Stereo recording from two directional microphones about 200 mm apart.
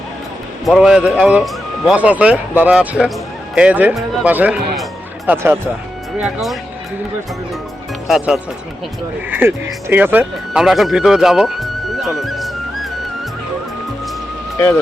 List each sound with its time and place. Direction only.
0.6 s speech: centre (ahead or behind)
8.0 s speech: centre (ahead or behind)